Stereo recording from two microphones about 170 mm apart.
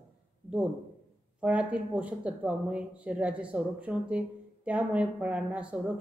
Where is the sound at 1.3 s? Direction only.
5° right (ahead or behind).